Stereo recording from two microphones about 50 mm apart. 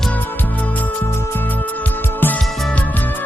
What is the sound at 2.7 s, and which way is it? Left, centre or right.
Music, left.